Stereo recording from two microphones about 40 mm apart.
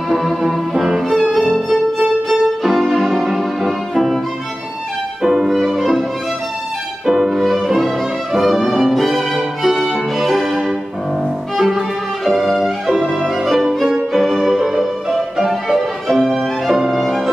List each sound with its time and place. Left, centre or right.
0.1 s violin: centre
2.6 s music: centre
5.4 s music: centre
7.1 s music: centre
11.5 s violin: centre
14.1 s music: centre
14.7 s music: centre